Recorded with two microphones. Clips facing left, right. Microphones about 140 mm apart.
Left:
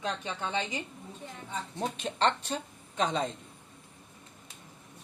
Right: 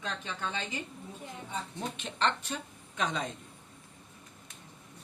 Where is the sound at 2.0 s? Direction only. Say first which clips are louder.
Left 3 dB; 40° left (ahead or behind).